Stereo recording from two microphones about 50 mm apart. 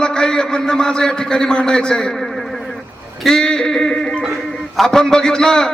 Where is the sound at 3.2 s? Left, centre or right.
Centre.